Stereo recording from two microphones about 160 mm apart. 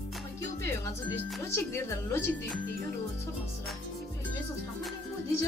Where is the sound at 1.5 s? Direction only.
15° left (ahead or behind).